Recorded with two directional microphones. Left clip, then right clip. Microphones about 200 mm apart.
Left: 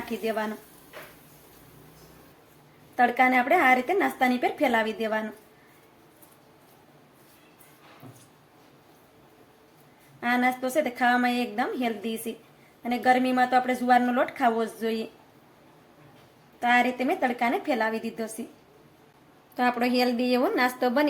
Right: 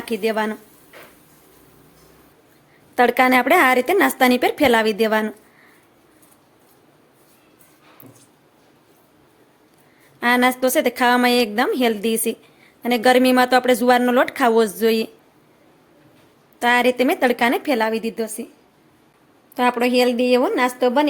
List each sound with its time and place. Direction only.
0.0 s a woman's voice: 40° right (ahead or behind)
2.9 s a woman's voice: 50° right (ahead or behind)
10.2 s a woman's voice: 50° right (ahead or behind)
16.6 s a woman's voice: 55° right (ahead or behind)
19.5 s a woman's voice: 30° right (ahead or behind)